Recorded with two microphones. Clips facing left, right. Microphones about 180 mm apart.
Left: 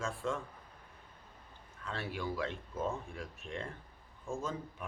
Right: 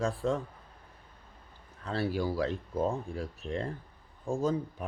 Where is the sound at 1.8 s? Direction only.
35° right (ahead or behind).